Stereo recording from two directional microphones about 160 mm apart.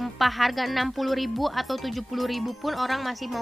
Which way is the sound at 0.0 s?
Centre (ahead or behind).